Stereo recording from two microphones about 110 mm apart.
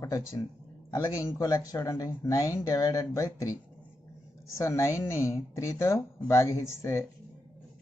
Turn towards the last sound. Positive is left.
turn(degrees=25)  # may be behind; listen again after turning